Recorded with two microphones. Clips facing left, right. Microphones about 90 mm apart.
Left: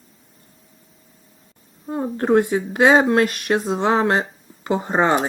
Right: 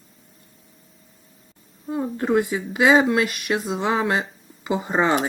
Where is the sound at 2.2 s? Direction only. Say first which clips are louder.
Left 5 dB; 45° left (ahead or behind).